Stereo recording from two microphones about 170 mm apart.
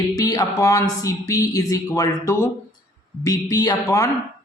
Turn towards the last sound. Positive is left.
turn(degrees=20)  # may be behind; listen again after turning